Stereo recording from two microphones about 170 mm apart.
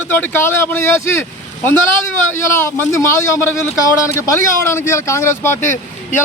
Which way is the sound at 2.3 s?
15° left (ahead or behind).